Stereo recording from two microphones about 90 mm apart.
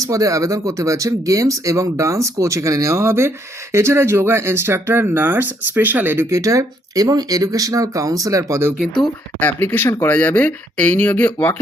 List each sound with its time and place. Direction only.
0.0 s speech: 40° right (ahead or behind); by 6.2 s 20° right (ahead or behind)
6.3 s speech: 35° right (ahead or behind)
9.4 s speech: 20° left (ahead or behind)